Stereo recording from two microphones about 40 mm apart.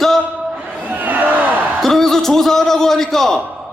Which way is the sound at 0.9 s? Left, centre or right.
Right.